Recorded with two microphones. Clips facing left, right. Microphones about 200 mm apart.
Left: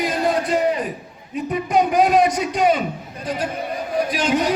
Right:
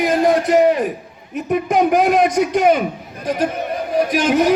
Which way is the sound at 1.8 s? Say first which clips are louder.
Right 1 dB; 50° right (ahead or behind).